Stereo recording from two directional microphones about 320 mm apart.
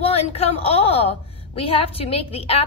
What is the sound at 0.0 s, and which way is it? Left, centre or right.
A woman's voice, centre.